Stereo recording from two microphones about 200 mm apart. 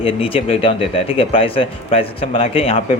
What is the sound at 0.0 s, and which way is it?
Speech, 25° left (ahead or behind).